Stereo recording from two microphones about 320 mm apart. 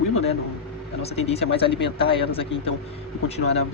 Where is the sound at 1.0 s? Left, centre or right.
Centre.